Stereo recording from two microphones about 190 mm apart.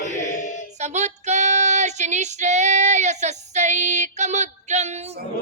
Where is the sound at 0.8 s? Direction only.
35° right (ahead or behind).